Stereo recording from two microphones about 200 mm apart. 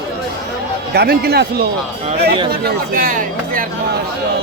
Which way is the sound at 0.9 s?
55° right (ahead or behind).